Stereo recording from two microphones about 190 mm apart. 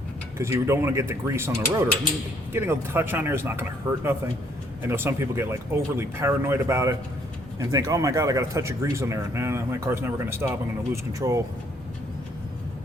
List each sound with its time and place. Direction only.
0.3 s speech: 15° right (ahead or behind)